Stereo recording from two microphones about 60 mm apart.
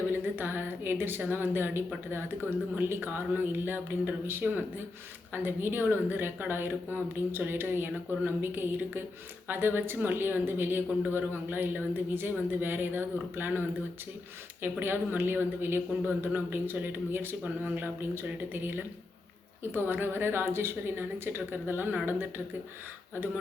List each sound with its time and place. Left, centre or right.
0.1 s speech: right
17.4 s speech: right
18.1 s speech: right